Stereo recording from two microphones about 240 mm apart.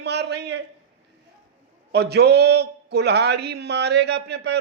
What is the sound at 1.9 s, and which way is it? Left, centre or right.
A man's voice, right.